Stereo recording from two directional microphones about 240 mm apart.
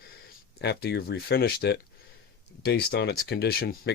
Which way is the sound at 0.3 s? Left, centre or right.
Left.